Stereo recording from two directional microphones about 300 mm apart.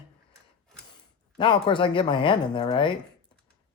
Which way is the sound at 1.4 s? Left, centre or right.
Centre.